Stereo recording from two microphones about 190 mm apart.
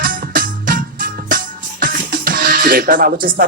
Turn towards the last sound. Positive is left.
turn(degrees=-50)  # may be behind; listen again after turning